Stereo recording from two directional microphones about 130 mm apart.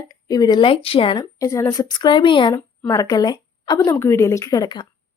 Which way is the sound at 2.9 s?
25° left (ahead or behind).